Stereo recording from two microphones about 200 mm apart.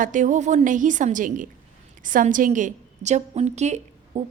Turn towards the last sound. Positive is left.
turn(degrees=-35)  # may be behind; listen again after turning